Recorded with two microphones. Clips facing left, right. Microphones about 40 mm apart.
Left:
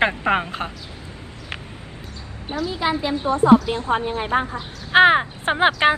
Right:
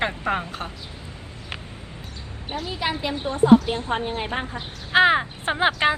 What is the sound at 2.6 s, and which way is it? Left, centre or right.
Speech, right.